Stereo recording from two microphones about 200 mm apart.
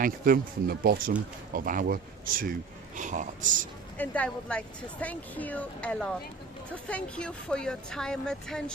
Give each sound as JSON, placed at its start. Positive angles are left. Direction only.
{"t": 0.0, "sound": "speech", "side_deg": -45}
{"t": 3.9, "sound": "speech", "side_deg": 10}